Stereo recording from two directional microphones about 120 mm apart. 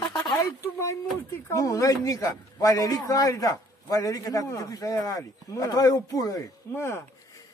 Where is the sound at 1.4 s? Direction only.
30° left (ahead or behind).